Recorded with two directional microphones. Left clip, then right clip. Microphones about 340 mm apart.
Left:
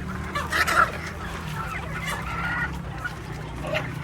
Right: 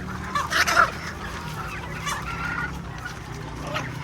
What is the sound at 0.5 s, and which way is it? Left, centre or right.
Fowl, centre.